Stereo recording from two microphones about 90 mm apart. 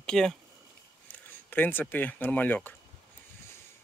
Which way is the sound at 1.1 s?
20° left (ahead or behind).